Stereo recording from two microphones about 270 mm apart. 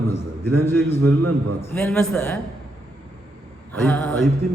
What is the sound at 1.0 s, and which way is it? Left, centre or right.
Speech, right.